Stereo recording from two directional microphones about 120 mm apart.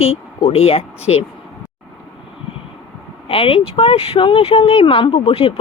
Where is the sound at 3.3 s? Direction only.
50° left (ahead or behind).